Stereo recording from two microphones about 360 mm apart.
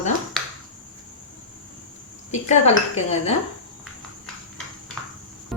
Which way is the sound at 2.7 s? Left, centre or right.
Centre.